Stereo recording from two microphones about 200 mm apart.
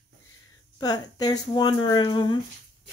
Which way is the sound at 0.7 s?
20° left (ahead or behind).